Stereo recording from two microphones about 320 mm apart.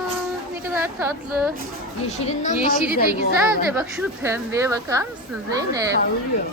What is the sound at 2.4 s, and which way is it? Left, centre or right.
Speech, left.